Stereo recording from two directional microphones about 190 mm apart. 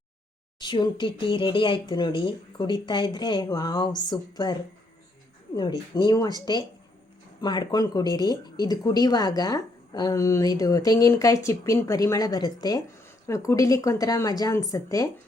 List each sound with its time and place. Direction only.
0.6 s a woman's voice: 25° left (ahead or behind)
5.9 s a woman's voice: 20° left (ahead or behind)